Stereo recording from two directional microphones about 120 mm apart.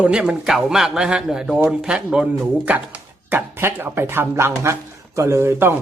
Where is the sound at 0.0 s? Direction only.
5° right (ahead or behind).